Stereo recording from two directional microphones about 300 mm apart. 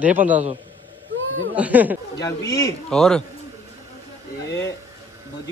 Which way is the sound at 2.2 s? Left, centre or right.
Centre.